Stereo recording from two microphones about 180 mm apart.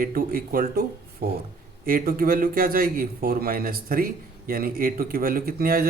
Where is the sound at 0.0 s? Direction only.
50° right (ahead or behind).